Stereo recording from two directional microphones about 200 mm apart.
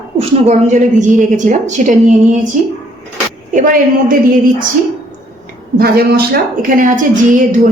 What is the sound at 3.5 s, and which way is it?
Speech, 45° right (ahead or behind).